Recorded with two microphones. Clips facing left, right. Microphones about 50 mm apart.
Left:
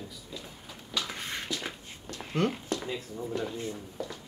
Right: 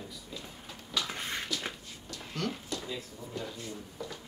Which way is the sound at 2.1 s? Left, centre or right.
Left.